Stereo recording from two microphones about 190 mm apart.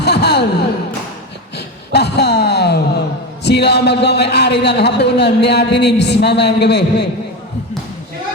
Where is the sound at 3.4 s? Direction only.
60° left (ahead or behind).